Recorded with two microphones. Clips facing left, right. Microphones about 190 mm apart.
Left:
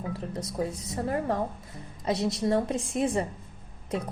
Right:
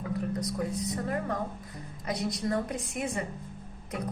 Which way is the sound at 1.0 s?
30° left (ahead or behind).